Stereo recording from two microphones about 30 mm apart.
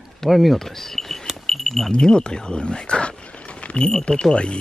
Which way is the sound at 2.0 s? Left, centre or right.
Left.